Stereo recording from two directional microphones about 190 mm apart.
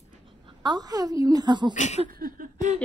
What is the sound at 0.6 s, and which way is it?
A woman's voice, 20° right (ahead or behind).